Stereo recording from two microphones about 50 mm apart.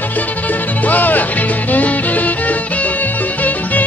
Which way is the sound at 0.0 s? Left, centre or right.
Left.